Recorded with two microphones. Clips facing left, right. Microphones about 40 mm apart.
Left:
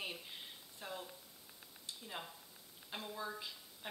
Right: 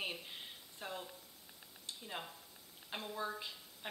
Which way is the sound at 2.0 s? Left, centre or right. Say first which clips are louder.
Right 2 dB; centre.